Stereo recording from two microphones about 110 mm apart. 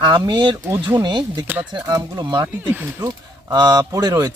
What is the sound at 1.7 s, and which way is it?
Speech, 40° right (ahead or behind).